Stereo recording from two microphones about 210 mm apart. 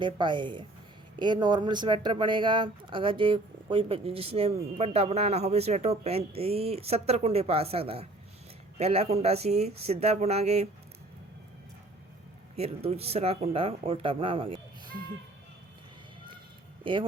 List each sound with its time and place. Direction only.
0.0 s speech: 20° right (ahead or behind)
12.5 s speech: 30° right (ahead or behind)
16.8 s speech: 25° right (ahead or behind)